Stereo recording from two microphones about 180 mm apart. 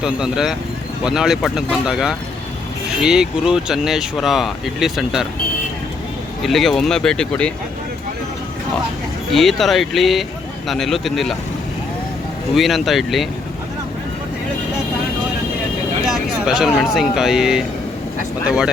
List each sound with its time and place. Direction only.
0.0 s speech: 5° right (ahead or behind)
6.4 s speech: centre (ahead or behind)
9.3 s speech: centre (ahead or behind)
12.5 s speech: centre (ahead or behind)
16.0 s speech: centre (ahead or behind)